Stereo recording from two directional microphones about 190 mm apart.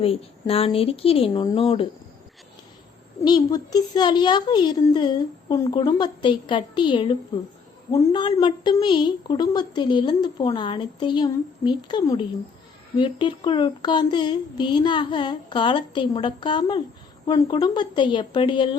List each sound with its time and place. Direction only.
0.0 s a woman's voice: 30° left (ahead or behind)
3.2 s a woman's voice: 20° left (ahead or behind)